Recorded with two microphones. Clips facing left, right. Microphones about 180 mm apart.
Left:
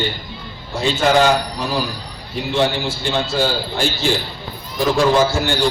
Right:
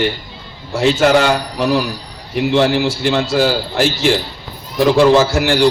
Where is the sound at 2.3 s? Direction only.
90° right.